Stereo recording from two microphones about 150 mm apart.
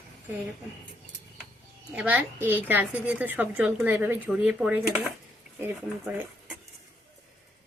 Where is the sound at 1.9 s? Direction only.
10° right (ahead or behind).